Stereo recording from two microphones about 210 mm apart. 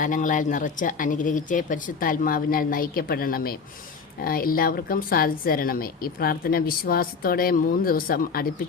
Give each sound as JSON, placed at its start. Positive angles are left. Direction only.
{"t": 0.0, "sound": "a woman's voice", "side_deg": 40}